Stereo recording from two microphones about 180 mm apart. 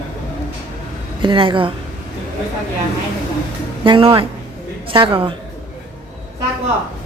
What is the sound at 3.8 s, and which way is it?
A woman's voice, 30° right (ahead or behind).